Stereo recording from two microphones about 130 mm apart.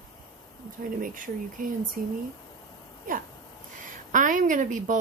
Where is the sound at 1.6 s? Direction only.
90° right.